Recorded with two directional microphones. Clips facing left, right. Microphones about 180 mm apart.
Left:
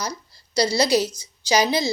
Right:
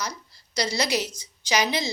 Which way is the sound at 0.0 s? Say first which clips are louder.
Left 3 dB; 35° left (ahead or behind).